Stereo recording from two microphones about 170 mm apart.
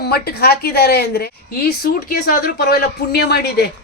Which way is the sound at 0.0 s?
70° left (ahead or behind).